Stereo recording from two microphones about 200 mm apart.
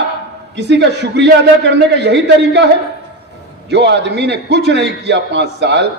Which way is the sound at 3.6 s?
60° right (ahead or behind).